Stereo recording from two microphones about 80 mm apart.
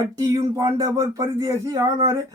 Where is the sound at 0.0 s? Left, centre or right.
Right.